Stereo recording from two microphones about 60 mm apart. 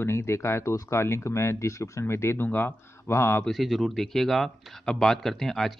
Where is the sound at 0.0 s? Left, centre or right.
Left.